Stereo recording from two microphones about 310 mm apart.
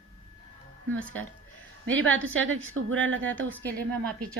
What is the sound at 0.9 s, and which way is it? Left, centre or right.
Speech, centre.